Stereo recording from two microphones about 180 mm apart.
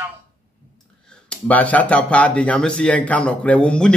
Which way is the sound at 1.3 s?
5° left (ahead or behind).